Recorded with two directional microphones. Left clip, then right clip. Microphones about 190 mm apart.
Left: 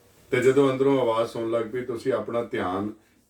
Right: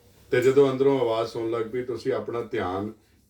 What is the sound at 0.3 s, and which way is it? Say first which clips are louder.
Speech: right 1 dB; 15° left (ahead or behind).